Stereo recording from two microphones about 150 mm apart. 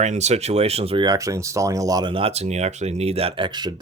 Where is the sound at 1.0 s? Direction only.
20° right (ahead or behind).